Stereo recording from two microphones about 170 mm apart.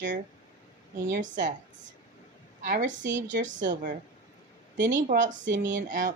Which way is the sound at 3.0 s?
90° right.